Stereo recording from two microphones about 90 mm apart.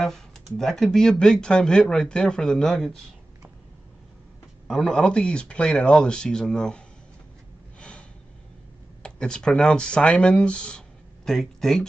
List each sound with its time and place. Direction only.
0.0 s speech: 5° left (ahead or behind)
4.6 s speech: 5° left (ahead or behind)
9.0 s speech: 10° left (ahead or behind)